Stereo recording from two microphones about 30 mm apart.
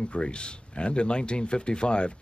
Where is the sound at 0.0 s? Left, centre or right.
Left.